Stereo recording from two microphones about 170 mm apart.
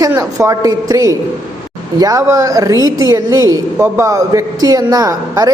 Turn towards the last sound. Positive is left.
turn(degrees=-20)  # may be behind; listen again after turning